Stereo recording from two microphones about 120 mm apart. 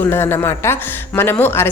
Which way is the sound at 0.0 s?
20° left (ahead or behind).